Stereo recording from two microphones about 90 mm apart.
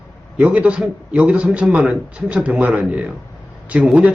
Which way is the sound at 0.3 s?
15° right (ahead or behind).